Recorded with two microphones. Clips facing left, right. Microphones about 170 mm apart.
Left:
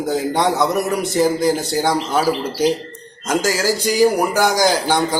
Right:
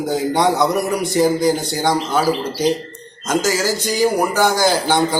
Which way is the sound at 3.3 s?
5° left (ahead or behind).